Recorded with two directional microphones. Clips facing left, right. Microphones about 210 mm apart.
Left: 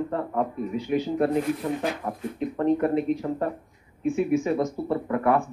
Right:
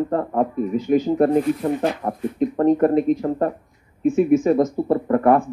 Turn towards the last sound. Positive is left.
turn(degrees=-45)  # may be behind; listen again after turning